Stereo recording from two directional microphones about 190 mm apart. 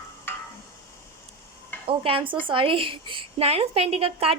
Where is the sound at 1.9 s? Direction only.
25° right (ahead or behind).